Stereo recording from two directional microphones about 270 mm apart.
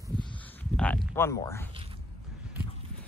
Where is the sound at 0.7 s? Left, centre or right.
Centre.